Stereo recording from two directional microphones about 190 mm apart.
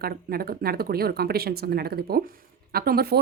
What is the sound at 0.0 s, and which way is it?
A woman's voice, 55° right (ahead or behind).